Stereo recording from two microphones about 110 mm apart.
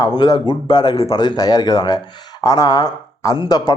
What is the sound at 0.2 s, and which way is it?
Speech, 40° left (ahead or behind).